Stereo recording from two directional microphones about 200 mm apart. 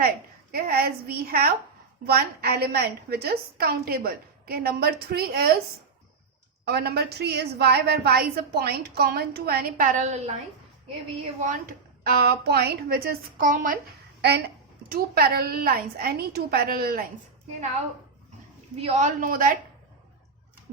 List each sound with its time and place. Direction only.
0.5 s a woman's voice: 50° right (ahead or behind)
6.7 s a woman's voice: 55° right (ahead or behind); by 10.3 s 35° right (ahead or behind)
11.3 s a woman's voice: 45° right (ahead or behind)
14.2 s a woman's voice: 55° right (ahead or behind)
18.8 s a woman's voice: 35° right (ahead or behind)